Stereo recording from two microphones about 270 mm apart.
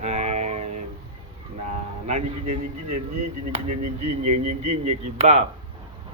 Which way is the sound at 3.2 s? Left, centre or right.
Right.